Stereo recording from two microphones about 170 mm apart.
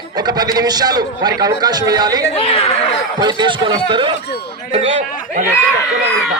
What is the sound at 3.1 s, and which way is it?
A man's voice, 25° right (ahead or behind).